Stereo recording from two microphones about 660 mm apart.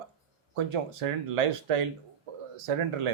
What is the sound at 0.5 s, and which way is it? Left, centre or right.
Speech, right.